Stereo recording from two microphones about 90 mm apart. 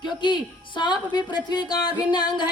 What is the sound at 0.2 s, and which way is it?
Speech, 60° left (ahead or behind).